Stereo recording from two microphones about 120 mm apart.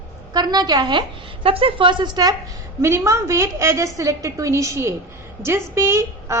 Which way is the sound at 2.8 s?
25° right (ahead or behind).